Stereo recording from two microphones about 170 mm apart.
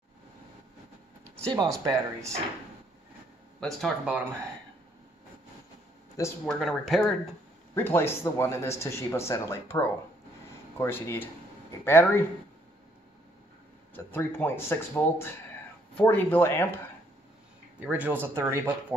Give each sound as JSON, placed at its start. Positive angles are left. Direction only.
{"t": 1.5, "sound": "speech", "side_deg": -25}
{"t": 3.6, "sound": "speech", "side_deg": 0}
{"t": 6.4, "sound": "speech", "side_deg": 0}
{"t": 7.7, "sound": "speech", "side_deg": 15}
{"t": 13.9, "sound": "speech", "side_deg": 10}
{"t": 17.8, "sound": "speech", "side_deg": -10}